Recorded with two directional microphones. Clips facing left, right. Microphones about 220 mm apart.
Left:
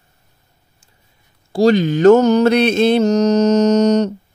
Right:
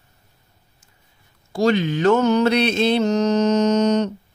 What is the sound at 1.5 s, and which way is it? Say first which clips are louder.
Mantra: left 5 dB; 35° left (ahead or behind).